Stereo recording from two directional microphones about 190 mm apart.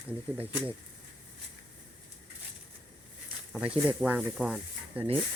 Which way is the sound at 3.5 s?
5° right (ahead or behind).